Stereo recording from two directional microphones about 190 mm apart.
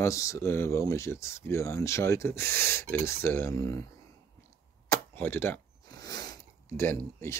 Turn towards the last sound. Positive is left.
turn(degrees=15)  # may be behind; listen again after turning